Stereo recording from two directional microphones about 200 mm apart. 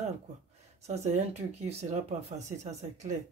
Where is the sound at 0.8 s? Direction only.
35° right (ahead or behind).